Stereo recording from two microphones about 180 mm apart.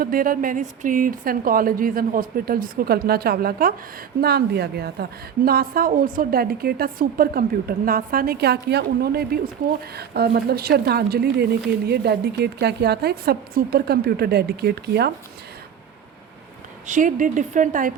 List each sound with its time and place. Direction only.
0.0 s a woman's voice: 55° right (ahead or behind)
16.8 s speech: 45° right (ahead or behind)